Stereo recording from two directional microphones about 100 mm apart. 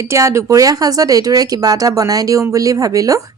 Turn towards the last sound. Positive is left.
turn(degrees=-35)  # may be behind; listen again after turning